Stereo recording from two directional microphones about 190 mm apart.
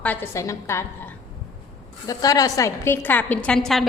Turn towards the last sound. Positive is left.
turn(degrees=0)  # may be behind; listen again after turning